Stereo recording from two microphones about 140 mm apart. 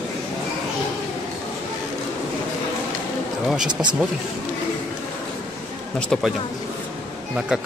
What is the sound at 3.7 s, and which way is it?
Speech, 30° right (ahead or behind).